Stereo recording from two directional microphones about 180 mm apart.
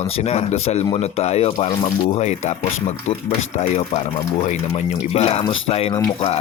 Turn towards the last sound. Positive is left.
turn(degrees=35)  # may be behind; listen again after turning